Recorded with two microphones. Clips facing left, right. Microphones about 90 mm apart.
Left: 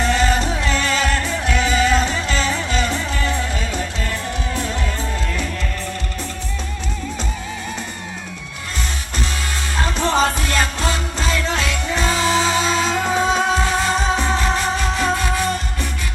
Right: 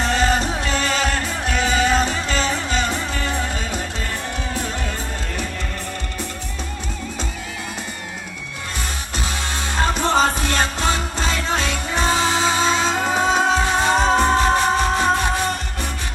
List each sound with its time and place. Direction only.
0.0 s music: 35° right (ahead or behind)
9.8 s music: 35° right (ahead or behind)